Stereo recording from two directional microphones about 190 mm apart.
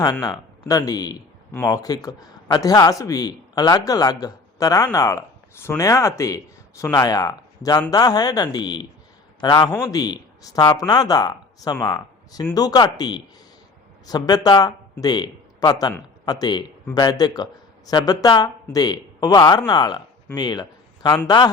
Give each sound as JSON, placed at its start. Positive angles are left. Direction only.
{"t": 0.0, "sound": "a man's voice", "side_deg": 20}